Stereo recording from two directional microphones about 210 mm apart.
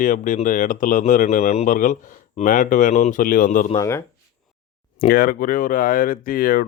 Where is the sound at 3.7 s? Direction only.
15° left (ahead or behind).